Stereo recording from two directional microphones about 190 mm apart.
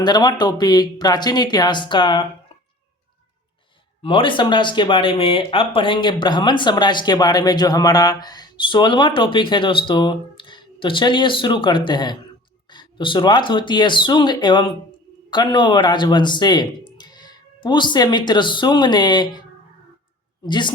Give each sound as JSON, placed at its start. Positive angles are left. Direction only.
{"t": 0.0, "sound": "speech", "side_deg": 20}
{"t": 4.0, "sound": "speech", "side_deg": 25}
{"t": 20.5, "sound": "speech", "side_deg": 25}